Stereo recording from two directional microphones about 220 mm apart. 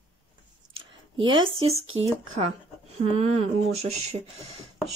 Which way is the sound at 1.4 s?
25° right (ahead or behind).